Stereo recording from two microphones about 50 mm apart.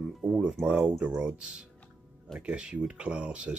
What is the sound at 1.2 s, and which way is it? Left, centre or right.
Speech, centre.